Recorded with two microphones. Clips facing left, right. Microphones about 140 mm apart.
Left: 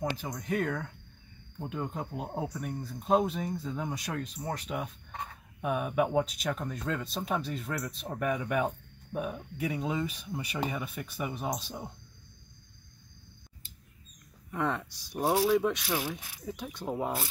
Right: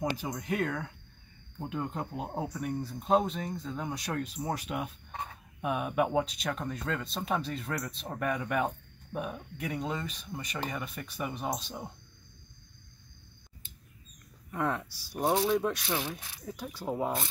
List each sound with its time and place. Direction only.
0.0 s speech: 10° right (ahead or behind)
14.5 s speech: 5° right (ahead or behind)
15.1 s speech: 5° left (ahead or behind)